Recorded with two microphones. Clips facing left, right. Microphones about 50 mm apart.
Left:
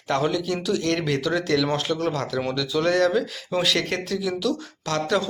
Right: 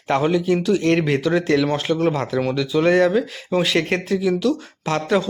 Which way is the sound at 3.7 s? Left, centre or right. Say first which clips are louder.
Right 5 dB; right.